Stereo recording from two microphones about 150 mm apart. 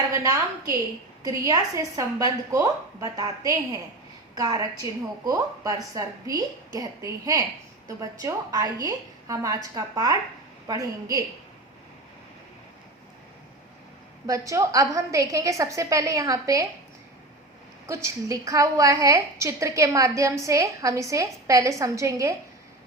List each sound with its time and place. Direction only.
0.1 s a woman's voice: 20° right (ahead or behind)
14.3 s a woman's voice: 20° right (ahead or behind)
17.8 s a woman's voice: 20° right (ahead or behind)